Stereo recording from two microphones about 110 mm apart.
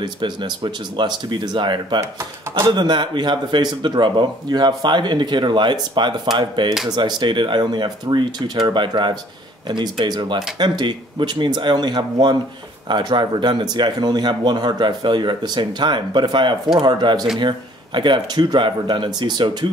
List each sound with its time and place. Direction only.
0.0 s speech: 45° right (ahead or behind)
2.0 s speech: 25° right (ahead or behind)
2.7 s speech: 45° right (ahead or behind)